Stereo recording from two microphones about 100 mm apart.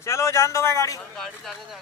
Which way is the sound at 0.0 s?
30° left (ahead or behind).